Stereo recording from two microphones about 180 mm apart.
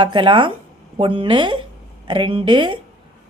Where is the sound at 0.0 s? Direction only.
25° right (ahead or behind).